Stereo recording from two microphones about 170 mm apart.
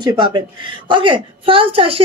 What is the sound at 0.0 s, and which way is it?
A man's voice, 25° right (ahead or behind).